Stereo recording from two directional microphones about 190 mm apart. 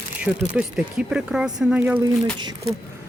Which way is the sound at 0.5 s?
5° right (ahead or behind).